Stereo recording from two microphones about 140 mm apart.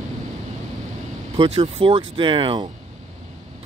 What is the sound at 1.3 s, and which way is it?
Speech, 35° right (ahead or behind).